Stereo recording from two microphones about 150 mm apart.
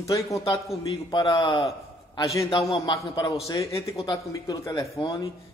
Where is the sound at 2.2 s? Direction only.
20° left (ahead or behind).